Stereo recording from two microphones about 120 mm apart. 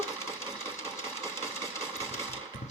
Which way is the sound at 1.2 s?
20° left (ahead or behind).